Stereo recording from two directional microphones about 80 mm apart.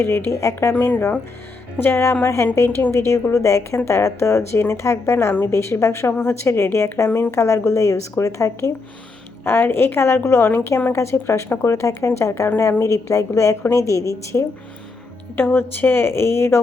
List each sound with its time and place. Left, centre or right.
0.0 s speech: left
0.7 s a woman's voice: left
2.6 s a woman's voice: left
2.9 s speech: left
9.4 s a woman's voice: left
15.4 s a woman's voice: left